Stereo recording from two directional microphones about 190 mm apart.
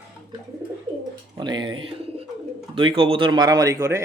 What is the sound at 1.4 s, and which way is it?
Bird, 25° right (ahead or behind).